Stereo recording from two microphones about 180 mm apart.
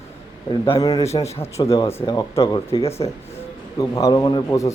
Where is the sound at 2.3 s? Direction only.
30° left (ahead or behind).